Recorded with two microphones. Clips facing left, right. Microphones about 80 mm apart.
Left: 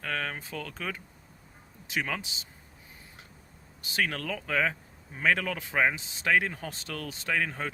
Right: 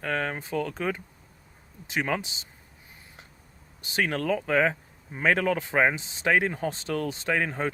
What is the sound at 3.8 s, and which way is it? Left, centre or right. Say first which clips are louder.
Speech: right 4 dB; right.